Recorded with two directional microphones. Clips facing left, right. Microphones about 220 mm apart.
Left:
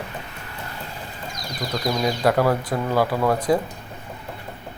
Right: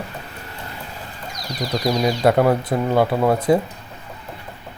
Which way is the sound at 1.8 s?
25° right (ahead or behind).